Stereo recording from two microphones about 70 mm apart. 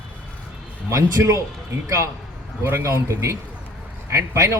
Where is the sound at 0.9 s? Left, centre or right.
Right.